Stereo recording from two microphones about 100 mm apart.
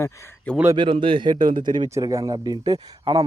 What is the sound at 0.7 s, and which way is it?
Speech, 55° right (ahead or behind).